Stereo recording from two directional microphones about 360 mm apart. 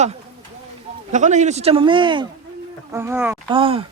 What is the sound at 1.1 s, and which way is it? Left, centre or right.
A man's voice, centre.